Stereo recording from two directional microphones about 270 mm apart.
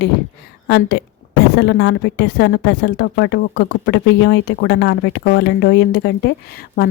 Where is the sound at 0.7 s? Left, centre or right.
Left.